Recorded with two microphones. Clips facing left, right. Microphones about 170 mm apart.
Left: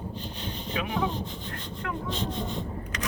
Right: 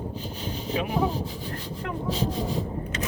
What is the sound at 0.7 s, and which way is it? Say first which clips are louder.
Speech: right 4 dB; 35° right (ahead or behind).